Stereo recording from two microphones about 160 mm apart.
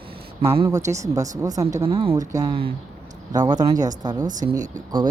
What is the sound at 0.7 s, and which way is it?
Speech, 20° right (ahead or behind).